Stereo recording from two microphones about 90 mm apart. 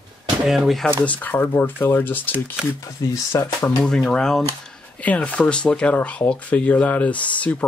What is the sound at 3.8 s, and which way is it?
Speech, 10° left (ahead or behind).